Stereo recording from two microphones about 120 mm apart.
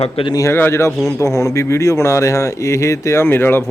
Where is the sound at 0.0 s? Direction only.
50° left (ahead or behind).